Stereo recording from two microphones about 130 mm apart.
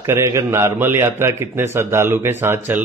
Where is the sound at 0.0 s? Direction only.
20° right (ahead or behind).